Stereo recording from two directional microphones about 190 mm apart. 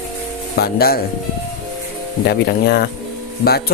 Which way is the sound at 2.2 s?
55° left (ahead or behind).